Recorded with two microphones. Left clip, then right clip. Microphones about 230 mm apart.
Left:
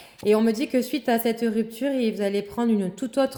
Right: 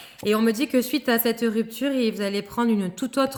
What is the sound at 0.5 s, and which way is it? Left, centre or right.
Speech, right.